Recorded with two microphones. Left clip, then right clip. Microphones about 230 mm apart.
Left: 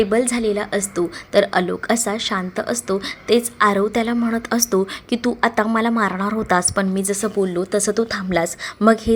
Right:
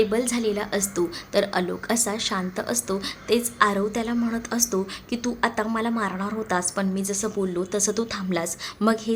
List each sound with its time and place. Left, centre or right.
0.0 s a woman's voice: centre